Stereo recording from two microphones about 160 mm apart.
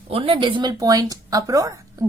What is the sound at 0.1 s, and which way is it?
Speech, 35° right (ahead or behind).